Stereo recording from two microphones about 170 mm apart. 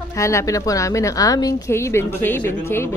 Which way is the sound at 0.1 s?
15° left (ahead or behind).